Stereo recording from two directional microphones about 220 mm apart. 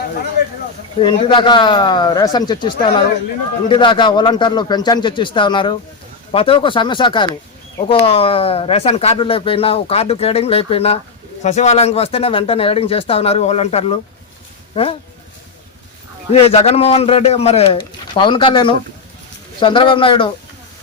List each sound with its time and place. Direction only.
0.9 s speech: 20° left (ahead or behind)
16.3 s speech: 25° left (ahead or behind)